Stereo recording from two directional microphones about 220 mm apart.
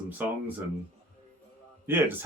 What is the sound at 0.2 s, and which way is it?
Speech, 10° right (ahead or behind).